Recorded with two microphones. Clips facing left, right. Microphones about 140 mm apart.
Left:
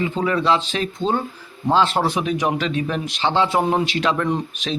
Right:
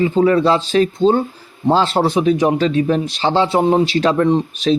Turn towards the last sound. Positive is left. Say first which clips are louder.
# right 8 dB
turn(degrees=-30)  # may be behind; listen again after turning